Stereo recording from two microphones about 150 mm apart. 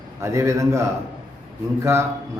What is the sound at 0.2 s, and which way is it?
A man's voice, 20° right (ahead or behind).